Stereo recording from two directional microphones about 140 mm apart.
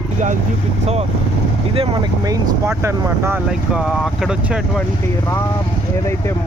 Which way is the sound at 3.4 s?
5° right (ahead or behind).